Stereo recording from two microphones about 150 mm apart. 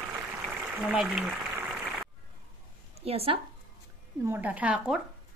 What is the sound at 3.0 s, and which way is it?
Speech, 40° right (ahead or behind).